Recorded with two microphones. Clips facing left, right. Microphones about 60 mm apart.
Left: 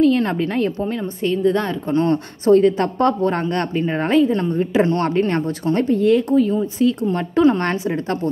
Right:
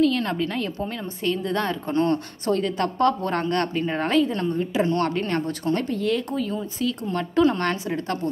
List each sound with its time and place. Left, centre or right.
0.0 s a woman's voice: left
0.7 s speech: centre
2.0 s speech: left